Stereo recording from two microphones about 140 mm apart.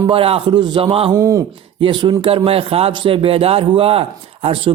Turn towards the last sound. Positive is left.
turn(degrees=-40)  # may be behind; listen again after turning